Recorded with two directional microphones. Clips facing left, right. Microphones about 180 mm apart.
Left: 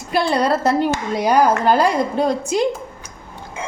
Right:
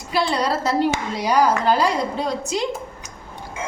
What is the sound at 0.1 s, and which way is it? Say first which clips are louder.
A woman's voice: left 4 dB; 55° left (ahead or behind).